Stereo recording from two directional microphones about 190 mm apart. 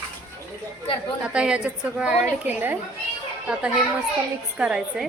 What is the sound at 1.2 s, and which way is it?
A woman's voice, 5° right (ahead or behind).